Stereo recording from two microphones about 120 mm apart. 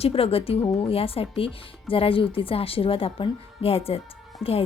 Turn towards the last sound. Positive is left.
turn(degrees=-5)  # may be behind; listen again after turning